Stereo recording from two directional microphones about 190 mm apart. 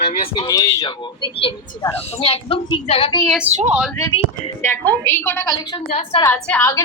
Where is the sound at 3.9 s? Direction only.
15° left (ahead or behind).